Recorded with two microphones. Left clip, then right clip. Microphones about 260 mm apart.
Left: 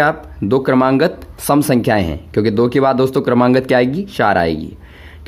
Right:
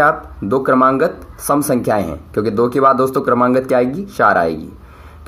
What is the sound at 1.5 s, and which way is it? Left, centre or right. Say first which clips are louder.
Speech: left 1 dB; left.